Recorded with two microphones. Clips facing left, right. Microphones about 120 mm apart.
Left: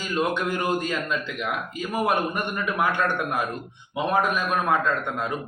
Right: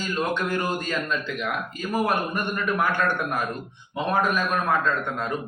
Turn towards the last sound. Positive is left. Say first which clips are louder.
# even
turn(degrees=15)  # may be behind; listen again after turning